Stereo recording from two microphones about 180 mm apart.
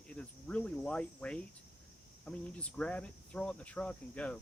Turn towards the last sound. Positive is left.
turn(degrees=5)  # may be behind; listen again after turning